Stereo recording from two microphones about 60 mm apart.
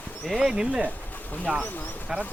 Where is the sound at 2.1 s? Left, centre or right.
Centre.